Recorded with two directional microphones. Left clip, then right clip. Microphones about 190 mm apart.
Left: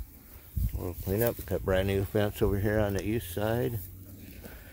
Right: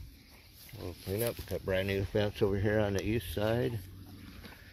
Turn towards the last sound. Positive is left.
turn(degrees=0)  # may be behind; listen again after turning